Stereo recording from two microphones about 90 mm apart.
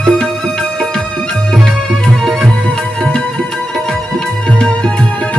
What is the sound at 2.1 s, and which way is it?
Music, 5° left (ahead or behind).